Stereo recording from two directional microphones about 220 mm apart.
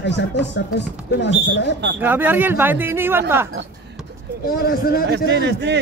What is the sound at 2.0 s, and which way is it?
Speech, 10° right (ahead or behind).